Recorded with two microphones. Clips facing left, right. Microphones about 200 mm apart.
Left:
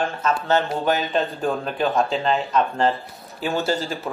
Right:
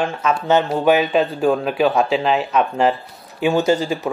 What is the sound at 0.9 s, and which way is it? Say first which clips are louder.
Speech: right 7 dB; 90° right.